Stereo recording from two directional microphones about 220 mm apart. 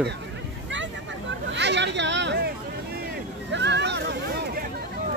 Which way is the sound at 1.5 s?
55° right (ahead or behind).